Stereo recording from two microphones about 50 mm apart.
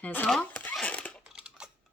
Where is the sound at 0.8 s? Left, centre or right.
Left.